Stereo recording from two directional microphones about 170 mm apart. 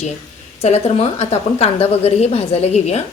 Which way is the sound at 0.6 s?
35° left (ahead or behind).